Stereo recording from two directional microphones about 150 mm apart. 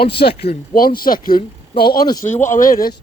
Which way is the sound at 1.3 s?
90° left.